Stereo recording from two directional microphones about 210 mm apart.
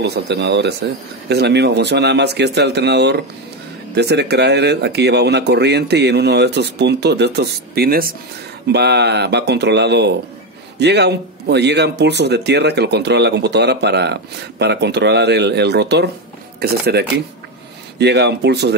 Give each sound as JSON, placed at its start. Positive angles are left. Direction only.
{"t": 0.0, "sound": "speech", "side_deg": -55}